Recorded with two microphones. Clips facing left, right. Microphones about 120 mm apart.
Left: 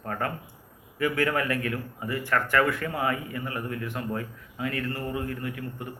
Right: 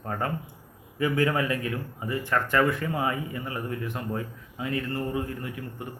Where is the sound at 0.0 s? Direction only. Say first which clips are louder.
Right 1 dB; 20° right (ahead or behind).